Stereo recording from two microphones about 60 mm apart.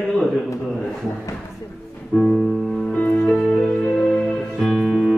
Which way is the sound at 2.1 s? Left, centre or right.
Centre.